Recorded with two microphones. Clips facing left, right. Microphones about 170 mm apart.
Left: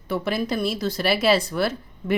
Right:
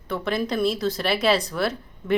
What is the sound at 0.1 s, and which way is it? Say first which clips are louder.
Speech: left 1 dB; 5° left (ahead or behind).